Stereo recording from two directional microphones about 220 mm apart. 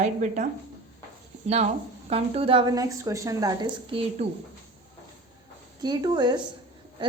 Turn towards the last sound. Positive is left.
turn(degrees=-20)  # may be behind; listen again after turning